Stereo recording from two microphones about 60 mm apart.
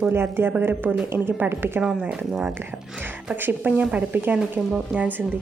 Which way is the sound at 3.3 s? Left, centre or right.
Right.